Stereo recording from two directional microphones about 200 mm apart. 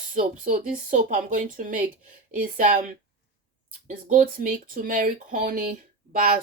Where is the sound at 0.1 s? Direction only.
40° right (ahead or behind).